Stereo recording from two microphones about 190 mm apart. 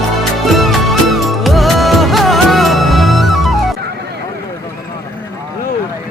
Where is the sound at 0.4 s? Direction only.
Centre (ahead or behind).